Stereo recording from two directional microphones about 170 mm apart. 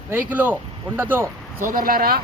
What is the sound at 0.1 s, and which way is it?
Speech, 10° right (ahead or behind).